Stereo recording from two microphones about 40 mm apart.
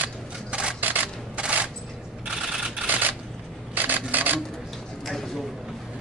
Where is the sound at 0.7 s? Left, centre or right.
Right.